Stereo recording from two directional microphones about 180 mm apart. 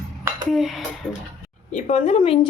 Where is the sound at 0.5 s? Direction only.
Centre (ahead or behind).